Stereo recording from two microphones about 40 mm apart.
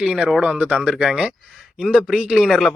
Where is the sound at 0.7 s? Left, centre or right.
Centre.